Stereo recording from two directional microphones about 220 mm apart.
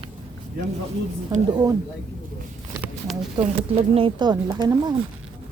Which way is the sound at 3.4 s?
25° right (ahead or behind).